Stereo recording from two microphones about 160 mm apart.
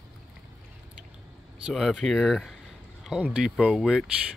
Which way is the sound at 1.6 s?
Centre (ahead or behind).